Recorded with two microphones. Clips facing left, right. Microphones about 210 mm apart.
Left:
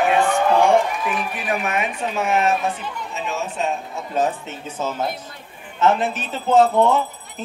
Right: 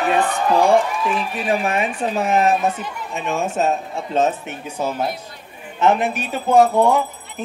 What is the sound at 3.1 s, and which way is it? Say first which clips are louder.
Speech: right 6 dB; 55° right (ahead or behind).